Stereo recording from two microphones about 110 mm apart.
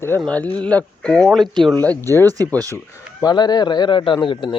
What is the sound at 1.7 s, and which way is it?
Speech, 15° left (ahead or behind).